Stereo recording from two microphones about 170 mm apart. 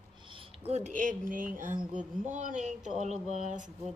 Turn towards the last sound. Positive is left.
turn(degrees=-45)  # may be behind; listen again after turning